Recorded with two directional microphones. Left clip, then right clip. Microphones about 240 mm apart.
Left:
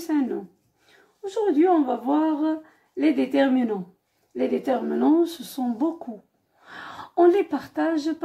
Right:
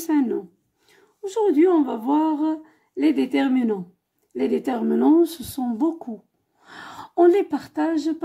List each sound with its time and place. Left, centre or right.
0.0 s speech: right